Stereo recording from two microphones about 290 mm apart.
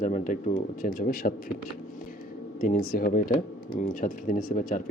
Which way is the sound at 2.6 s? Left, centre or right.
Left.